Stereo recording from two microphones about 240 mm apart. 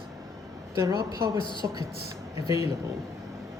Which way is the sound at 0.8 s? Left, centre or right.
Centre.